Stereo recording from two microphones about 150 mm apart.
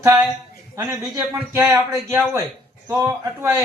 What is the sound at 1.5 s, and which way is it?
A man's voice, 15° right (ahead or behind).